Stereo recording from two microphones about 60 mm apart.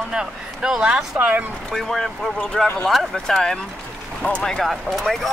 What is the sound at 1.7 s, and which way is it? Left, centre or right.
Speech, centre.